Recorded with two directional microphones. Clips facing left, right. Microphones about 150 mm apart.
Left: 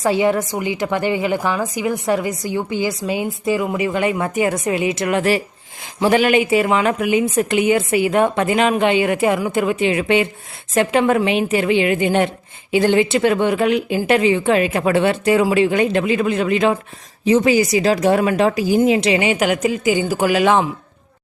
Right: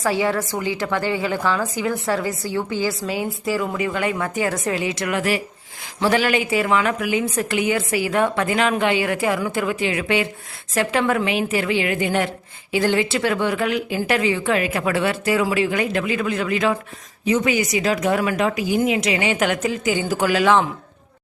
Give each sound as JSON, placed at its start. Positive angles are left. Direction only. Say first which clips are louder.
{"t": 0.0, "sound": "a woman's voice", "louder": "left 4 dB", "side_deg": 20}
{"t": 19.2, "sound": "speech", "louder": "left 3 dB", "side_deg": 15}